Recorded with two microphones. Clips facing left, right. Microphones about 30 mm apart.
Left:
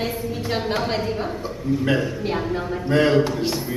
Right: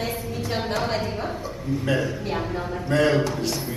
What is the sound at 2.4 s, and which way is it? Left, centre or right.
Speech, centre.